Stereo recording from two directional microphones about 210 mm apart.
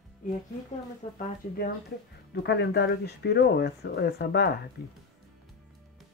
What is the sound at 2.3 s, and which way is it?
Speech, 50° left (ahead or behind).